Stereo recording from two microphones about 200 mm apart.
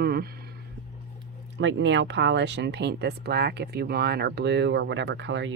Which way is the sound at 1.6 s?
65° right (ahead or behind).